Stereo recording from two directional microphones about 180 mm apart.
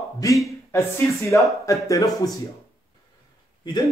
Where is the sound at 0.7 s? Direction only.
15° left (ahead or behind).